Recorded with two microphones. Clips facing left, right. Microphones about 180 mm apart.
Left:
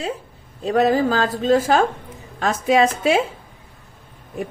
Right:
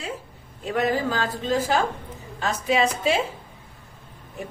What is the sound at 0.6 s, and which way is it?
A woman's voice, 35° left (ahead or behind).